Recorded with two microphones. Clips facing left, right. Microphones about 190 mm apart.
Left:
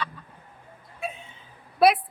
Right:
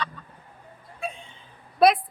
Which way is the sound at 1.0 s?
5° left (ahead or behind).